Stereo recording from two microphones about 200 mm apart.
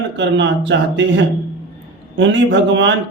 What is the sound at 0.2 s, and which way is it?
A man's voice, 65° right (ahead or behind).